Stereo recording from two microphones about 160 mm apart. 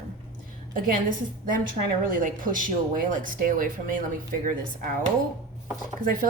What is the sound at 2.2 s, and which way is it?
Speech, 60° right (ahead or behind).